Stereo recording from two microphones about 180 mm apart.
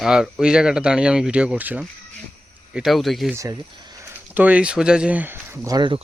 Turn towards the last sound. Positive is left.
turn(degrees=-25)  # may be behind; listen again after turning